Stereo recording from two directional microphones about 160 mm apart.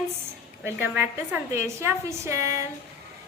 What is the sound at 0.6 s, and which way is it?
A woman's voice, 10° right (ahead or behind).